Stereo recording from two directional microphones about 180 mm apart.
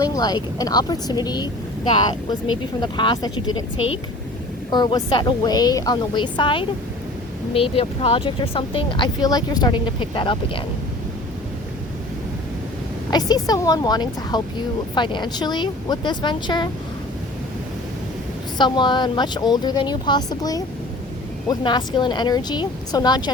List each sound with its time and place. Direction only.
0.0 s speech: 20° left (ahead or behind)
4.7 s speech: 25° left (ahead or behind)
13.1 s speech: 20° left (ahead or behind)
18.5 s speech: 25° left (ahead or behind)